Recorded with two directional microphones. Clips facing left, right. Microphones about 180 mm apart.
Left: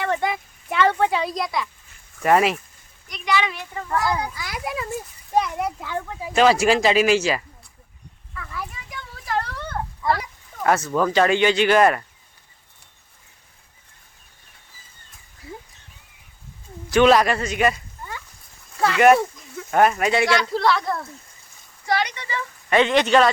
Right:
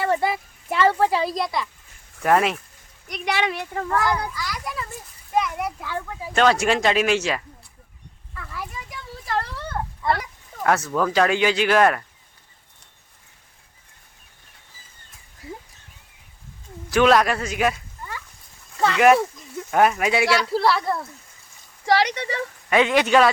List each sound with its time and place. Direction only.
0.1 s a sound: 5° right (ahead or behind)
2.2 s speech: centre (ahead or behind)
3.1 s speech: 60° right (ahead or behind)
4.4 s a child's voice: 50° left (ahead or behind)
5.3 s a child's voice: 30° left (ahead or behind)
5.8 s speech: 15° left (ahead or behind)
6.3 s speech: 5° left (ahead or behind)
8.4 s children playing: centre (ahead or behind)
10.6 s speech: centre (ahead or behind)
16.9 s speech: centre (ahead or behind)
18.8 s speech: centre (ahead or behind)
21.8 s speech: 80° right
22.7 s speech: 5° right (ahead or behind)